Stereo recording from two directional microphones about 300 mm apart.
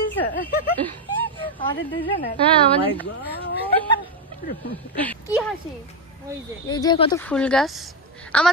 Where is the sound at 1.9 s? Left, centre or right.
Centre.